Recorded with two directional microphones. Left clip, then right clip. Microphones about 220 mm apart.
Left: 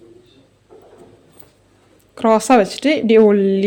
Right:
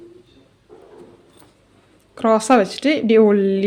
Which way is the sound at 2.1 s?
10° left (ahead or behind).